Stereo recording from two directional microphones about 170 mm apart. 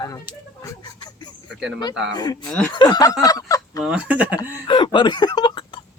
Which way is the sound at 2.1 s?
25° left (ahead or behind).